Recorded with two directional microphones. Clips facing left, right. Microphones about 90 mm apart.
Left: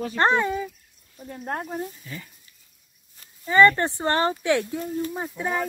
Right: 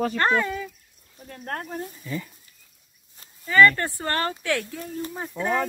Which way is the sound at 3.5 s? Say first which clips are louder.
Left 1 dB; 20° left (ahead or behind).